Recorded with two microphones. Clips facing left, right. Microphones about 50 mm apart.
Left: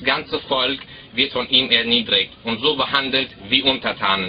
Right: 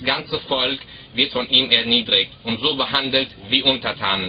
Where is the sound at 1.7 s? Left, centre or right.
Centre.